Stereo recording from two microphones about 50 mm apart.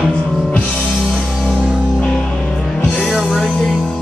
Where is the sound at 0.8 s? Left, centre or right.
Centre.